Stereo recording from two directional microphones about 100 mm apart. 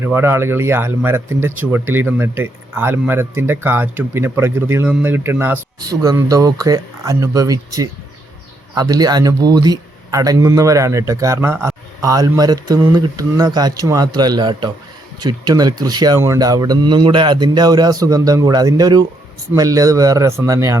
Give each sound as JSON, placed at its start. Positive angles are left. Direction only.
{"t": 0.0, "sound": "speech", "side_deg": -25}
{"t": 5.8, "sound": "speech", "side_deg": -35}